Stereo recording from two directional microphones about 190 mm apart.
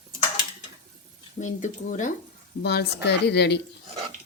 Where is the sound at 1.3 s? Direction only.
40° left (ahead or behind).